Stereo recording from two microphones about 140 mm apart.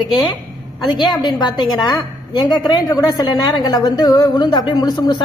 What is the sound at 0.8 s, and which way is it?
A woman's voice, 30° left (ahead or behind).